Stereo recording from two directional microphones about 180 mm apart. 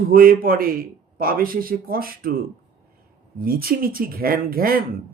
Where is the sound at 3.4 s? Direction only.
55° right (ahead or behind).